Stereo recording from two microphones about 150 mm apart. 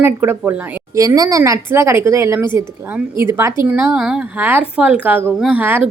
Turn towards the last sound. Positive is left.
turn(degrees=-15)  # may be behind; listen again after turning